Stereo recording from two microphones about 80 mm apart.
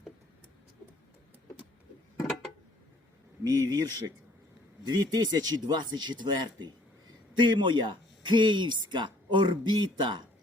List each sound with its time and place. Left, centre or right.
3.4 s speech: right
4.9 s speech: right
7.3 s speech: right